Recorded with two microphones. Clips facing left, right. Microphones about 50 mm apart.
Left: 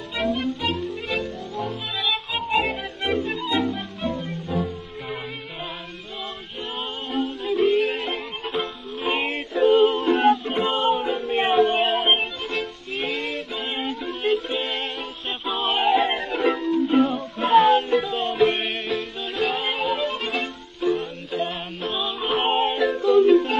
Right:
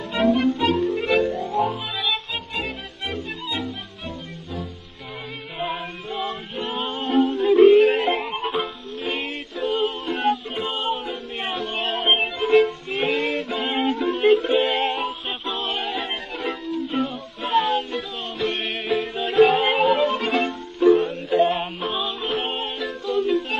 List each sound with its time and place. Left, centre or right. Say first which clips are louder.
0.6 s music: right 6 dB; right; by 1.8 s centre
2.5 s music: left 11 dB; centre
3.5 s music: left 6 dB; left
7.1 s music: right 8 dB; right
7.4 s music: right 8 dB; right
9.0 s music: left 4 dB; centre
9.7 s music: left 7 dB; left; by 12.2 s centre
12.2 s music: right 9 dB; centre
12.9 s music: right 1 dB; right
15.4 s music: left 6 dB; centre
18.9 s music: right 4 dB; centre
22.2 s music: left 5 dB; centre; by 23.6 s left